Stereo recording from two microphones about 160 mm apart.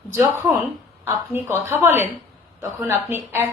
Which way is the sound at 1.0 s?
15° right (ahead or behind).